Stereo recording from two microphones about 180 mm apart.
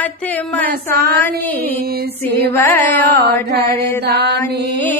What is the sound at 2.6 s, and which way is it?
Carnatic music, 10° left (ahead or behind).